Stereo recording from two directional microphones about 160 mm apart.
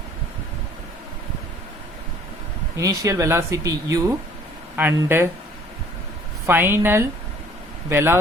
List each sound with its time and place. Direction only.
2.7 s a woman's voice: 20° right (ahead or behind)
6.4 s a woman's voice: 15° right (ahead or behind)